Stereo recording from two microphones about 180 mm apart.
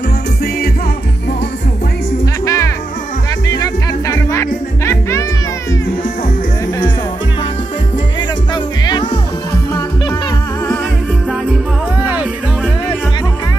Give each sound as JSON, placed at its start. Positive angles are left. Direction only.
{"t": 2.4, "sound": "music", "side_deg": 15}
{"t": 8.8, "sound": "music", "side_deg": 25}
{"t": 12.0, "sound": "music", "side_deg": -10}